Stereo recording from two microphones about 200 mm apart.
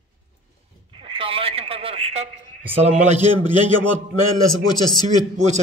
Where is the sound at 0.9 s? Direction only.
25° right (ahead or behind).